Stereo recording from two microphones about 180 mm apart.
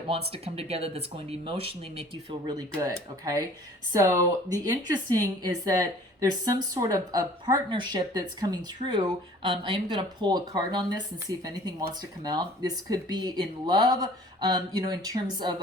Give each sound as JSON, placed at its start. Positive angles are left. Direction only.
{"t": 0.3, "sound": "a woman's voice", "side_deg": -35}